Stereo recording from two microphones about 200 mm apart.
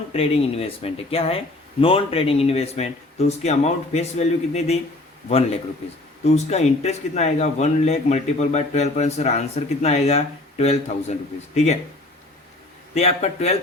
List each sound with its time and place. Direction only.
0.1 s speech: 30° left (ahead or behind)
6.2 s speech: 35° left (ahead or behind)
12.9 s speech: 30° left (ahead or behind)